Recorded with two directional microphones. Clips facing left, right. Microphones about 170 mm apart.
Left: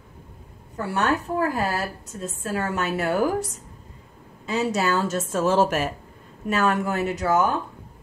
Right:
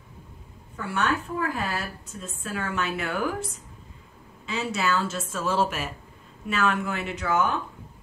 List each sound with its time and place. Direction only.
0.7 s a woman's voice: 35° left (ahead or behind)